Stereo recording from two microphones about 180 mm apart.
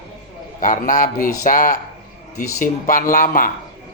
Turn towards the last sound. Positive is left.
turn(degrees=45)  # may be behind; listen again after turning